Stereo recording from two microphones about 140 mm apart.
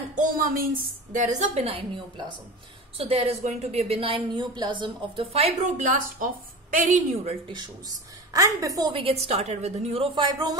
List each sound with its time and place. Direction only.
0.3 s speech: 90° right
1.1 s a woman's voice: 55° right (ahead or behind)
3.0 s a woman's voice: 45° right (ahead or behind)
5.2 s a woman's voice: 50° right (ahead or behind); by 7.3 s 65° right (ahead or behind)
8.3 s a woman's voice: 25° right (ahead or behind); by 10.0 s 50° right (ahead or behind)
10.1 s a man's voice: 35° right (ahead or behind)